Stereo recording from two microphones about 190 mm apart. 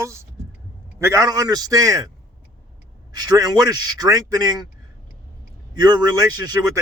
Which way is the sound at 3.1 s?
20° right (ahead or behind).